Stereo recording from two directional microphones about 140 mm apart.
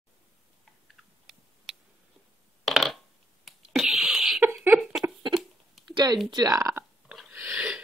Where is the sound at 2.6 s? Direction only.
Centre (ahead or behind).